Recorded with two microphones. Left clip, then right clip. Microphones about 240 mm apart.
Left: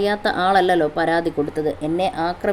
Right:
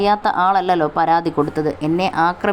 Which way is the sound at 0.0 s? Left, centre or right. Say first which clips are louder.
Right 4 dB; centre.